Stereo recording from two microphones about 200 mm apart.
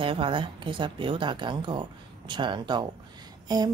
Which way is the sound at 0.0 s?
25° right (ahead or behind).